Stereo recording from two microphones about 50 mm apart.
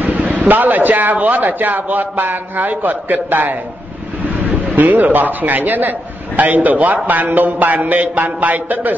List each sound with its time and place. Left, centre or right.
0.0 s a man's voice: right
4.7 s a man's voice: right